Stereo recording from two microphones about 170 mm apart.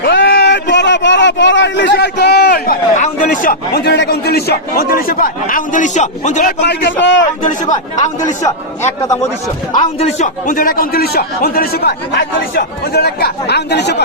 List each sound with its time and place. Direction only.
0.0 s speech: 80° left; by 6.5 s 45° left (ahead or behind)
6.6 s a man's voice: 85° left
7.9 s a man's voice: 45° left (ahead or behind)
8.4 s a man's voice: 20° left (ahead or behind)
9.7 s a man's voice: 40° left (ahead or behind); by 13.9 s 80° left